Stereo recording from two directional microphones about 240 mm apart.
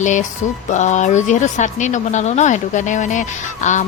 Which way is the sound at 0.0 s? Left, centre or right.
Left.